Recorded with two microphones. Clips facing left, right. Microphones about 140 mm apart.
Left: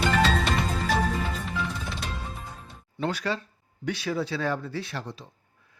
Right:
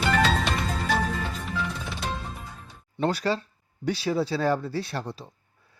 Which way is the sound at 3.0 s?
35° right (ahead or behind).